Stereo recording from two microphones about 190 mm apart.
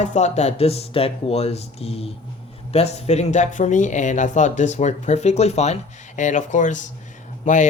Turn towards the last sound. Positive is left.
turn(degrees=40)  # may be behind; listen again after turning